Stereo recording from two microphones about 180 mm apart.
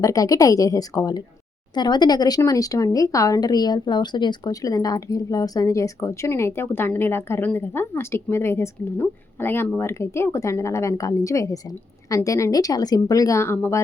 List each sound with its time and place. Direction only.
0.0 s a woman's voice: 20° left (ahead or behind)